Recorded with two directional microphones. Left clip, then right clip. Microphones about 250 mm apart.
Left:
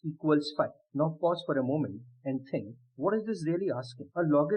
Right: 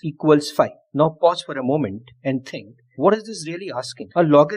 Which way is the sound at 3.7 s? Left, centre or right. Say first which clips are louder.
Right 12 dB; right.